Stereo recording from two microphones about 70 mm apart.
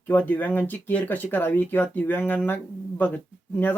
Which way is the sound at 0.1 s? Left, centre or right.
Left.